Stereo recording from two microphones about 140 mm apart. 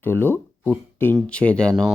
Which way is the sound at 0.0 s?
15° left (ahead or behind).